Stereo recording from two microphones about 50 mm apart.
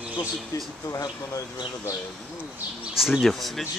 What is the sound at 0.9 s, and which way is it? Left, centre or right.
Speech, left.